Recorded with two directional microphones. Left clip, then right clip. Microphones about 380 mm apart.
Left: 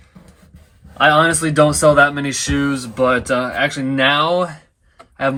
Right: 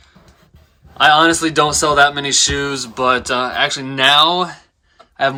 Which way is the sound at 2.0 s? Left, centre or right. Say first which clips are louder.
Right 2 dB; centre.